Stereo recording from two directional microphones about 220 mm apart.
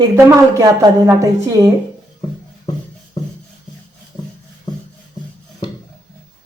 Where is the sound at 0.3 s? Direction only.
15° right (ahead or behind).